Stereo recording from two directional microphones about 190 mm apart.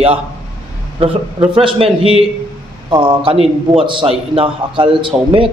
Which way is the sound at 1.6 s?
30° right (ahead or behind).